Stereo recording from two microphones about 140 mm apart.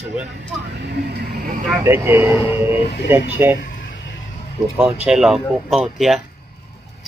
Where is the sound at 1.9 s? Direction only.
15° right (ahead or behind).